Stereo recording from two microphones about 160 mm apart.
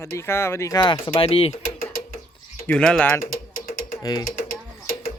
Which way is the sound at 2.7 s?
5° left (ahead or behind).